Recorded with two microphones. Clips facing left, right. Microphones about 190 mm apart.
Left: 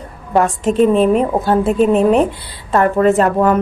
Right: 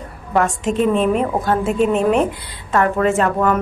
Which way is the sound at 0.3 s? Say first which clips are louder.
Left 3 dB; 35° left (ahead or behind).